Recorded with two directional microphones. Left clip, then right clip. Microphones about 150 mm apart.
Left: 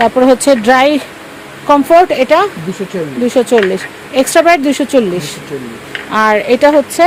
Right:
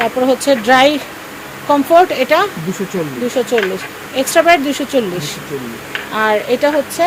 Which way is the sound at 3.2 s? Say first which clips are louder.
Left 6 dB; 70° left (ahead or behind).